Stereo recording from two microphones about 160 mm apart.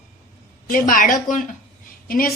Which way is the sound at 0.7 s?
60° left (ahead or behind).